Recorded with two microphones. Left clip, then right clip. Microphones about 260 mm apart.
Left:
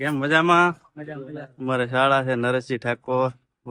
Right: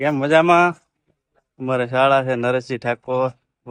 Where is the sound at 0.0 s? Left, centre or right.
Centre.